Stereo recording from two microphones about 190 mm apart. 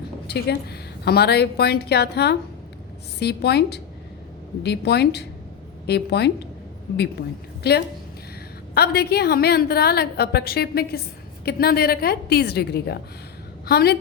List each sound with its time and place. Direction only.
0.3 s a woman's voice: 60° left (ahead or behind)
7.6 s a woman's voice: 55° left (ahead or behind)